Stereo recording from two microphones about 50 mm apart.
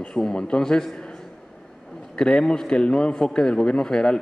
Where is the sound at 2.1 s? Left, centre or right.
Centre.